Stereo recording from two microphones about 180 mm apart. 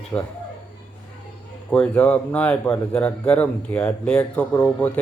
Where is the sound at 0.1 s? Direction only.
15° left (ahead or behind).